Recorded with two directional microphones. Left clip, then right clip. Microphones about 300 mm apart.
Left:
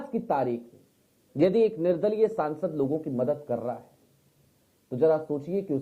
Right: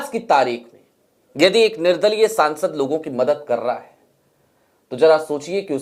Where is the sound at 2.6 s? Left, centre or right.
Right.